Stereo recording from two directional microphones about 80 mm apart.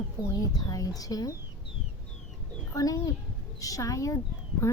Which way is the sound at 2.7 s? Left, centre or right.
Left.